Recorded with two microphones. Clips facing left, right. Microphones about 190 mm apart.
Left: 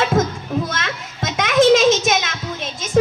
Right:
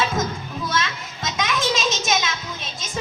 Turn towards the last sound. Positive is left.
turn(degrees=60)  # may be behind; listen again after turning